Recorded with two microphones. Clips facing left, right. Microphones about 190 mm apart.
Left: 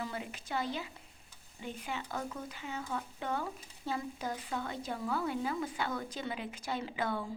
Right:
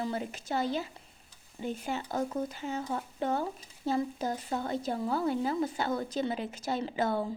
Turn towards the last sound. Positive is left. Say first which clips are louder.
# right 6 dB
turn(degrees=-35)  # may be behind; listen again after turning